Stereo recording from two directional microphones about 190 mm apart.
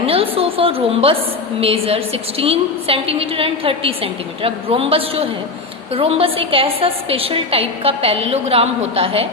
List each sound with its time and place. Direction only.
0.0 s a woman's voice: 30° right (ahead or behind)